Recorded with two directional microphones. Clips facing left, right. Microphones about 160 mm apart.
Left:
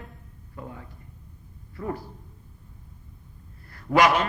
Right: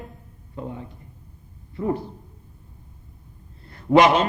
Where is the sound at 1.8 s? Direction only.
20° right (ahead or behind).